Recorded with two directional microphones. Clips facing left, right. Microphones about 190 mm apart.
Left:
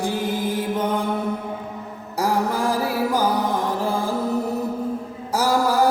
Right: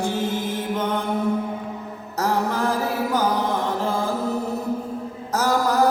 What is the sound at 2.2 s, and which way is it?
Mantra, 10° left (ahead or behind).